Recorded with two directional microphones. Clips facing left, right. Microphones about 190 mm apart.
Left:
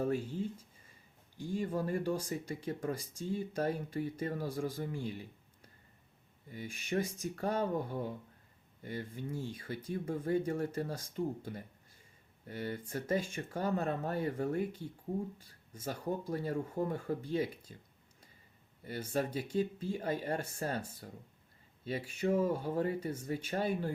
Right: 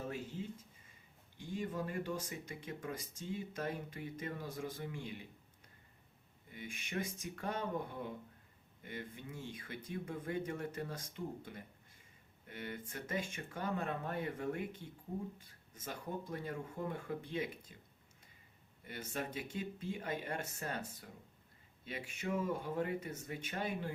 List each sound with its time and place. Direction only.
0.0 s a sound: 40° left (ahead or behind)
1.4 s speech: 40° left (ahead or behind)
6.5 s speech: 35° left (ahead or behind)
15.7 s speech: 30° left (ahead or behind)
18.9 s speech: 35° left (ahead or behind)